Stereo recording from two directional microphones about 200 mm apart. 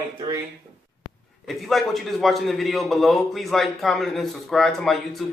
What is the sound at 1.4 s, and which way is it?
A man's voice, centre (ahead or behind).